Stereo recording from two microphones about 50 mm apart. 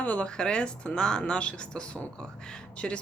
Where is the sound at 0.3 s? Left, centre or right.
Centre.